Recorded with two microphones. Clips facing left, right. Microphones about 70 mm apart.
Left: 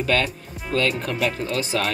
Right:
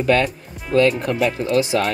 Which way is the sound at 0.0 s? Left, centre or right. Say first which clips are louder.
Right 5 dB; centre.